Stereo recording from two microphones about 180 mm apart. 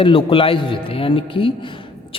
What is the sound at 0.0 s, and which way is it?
A man's voice, 30° left (ahead or behind).